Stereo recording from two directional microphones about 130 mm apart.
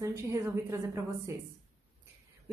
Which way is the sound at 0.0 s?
25° right (ahead or behind).